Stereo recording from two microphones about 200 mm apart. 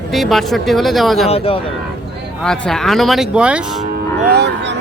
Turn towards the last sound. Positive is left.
turn(degrees=-60)  # may be behind; listen again after turning